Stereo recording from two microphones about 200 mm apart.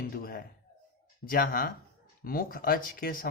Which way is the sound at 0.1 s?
50° left (ahead or behind).